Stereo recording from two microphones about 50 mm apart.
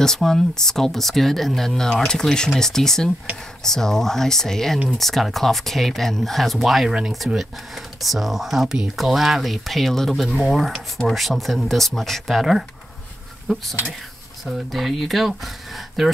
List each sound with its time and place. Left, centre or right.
0.0 s speech: centre